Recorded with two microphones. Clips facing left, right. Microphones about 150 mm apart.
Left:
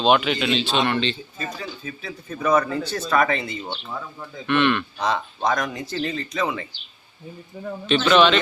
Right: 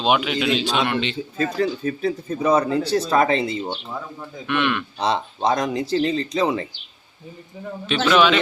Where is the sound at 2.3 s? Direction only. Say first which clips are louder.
Right 1 dB; 30° right (ahead or behind).